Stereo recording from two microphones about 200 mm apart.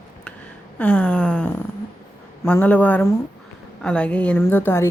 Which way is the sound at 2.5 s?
5° left (ahead or behind).